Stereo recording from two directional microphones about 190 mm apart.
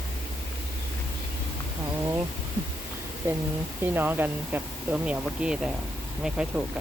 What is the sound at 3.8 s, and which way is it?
Speech, 10° right (ahead or behind).